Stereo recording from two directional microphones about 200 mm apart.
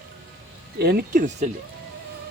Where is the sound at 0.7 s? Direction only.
50° right (ahead or behind).